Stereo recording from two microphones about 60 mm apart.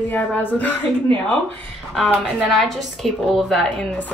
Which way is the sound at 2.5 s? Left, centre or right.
Centre.